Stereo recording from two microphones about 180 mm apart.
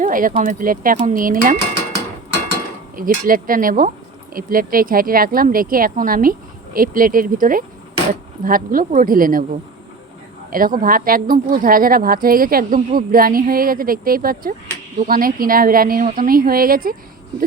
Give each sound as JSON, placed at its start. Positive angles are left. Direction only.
{"t": 0.0, "sound": "speech", "side_deg": -50}
{"t": 2.9, "sound": "speech", "side_deg": -50}
{"t": 10.5, "sound": "speech", "side_deg": -50}